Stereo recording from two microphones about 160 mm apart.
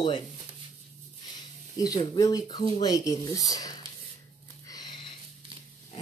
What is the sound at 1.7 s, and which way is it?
Speech, 25° left (ahead or behind).